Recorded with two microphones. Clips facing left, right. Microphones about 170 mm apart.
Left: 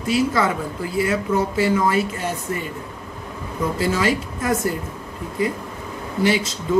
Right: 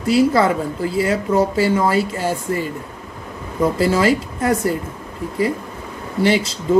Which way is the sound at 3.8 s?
30° right (ahead or behind).